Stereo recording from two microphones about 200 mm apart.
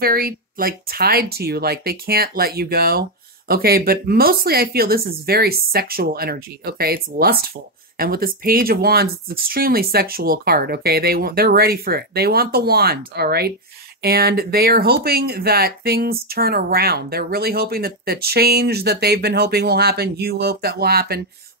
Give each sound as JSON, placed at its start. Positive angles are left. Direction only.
{"t": 0.0, "sound": "speech", "side_deg": -50}